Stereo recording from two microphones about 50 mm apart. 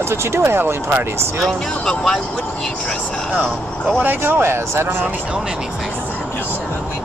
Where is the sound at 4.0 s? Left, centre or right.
Right.